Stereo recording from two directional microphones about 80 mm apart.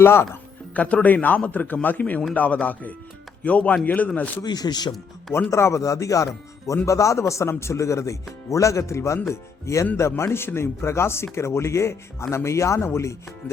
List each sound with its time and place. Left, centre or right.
0.0 s speech: left
0.7 s a man's voice: centre
4.4 s speech: left
5.5 s speech: left